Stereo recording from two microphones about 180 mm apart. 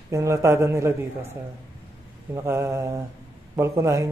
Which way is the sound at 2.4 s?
15° right (ahead or behind).